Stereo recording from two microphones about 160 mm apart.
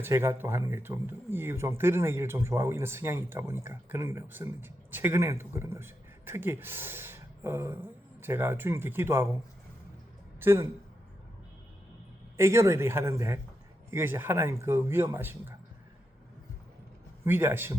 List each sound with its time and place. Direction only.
0.0 s speech: 15° right (ahead or behind)
10.4 s speech: 15° right (ahead or behind)
12.4 s speech: 15° right (ahead or behind)
17.2 s speech: 15° right (ahead or behind)